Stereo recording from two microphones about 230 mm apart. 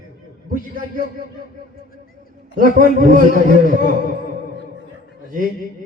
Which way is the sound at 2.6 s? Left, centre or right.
Right.